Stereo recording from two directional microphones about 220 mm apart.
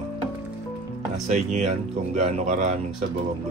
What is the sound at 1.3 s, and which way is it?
Speech, 35° right (ahead or behind).